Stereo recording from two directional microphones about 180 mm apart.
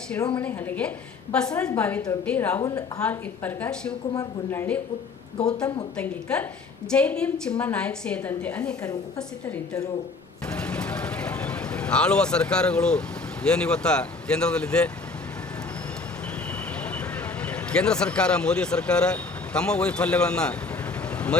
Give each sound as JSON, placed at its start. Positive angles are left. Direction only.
{"t": 0.3, "sound": "a woman's voice", "side_deg": 10}
{"t": 2.6, "sound": "a woman's voice", "side_deg": 20}
{"t": 3.0, "sound": "a woman's voice", "side_deg": 10}
{"t": 6.0, "sound": "a woman's voice", "side_deg": 5}
{"t": 10.5, "sound": "a sound", "side_deg": 5}
{"t": 13.4, "sound": "speech", "side_deg": 5}
{"t": 16.8, "sound": "speech", "side_deg": 5}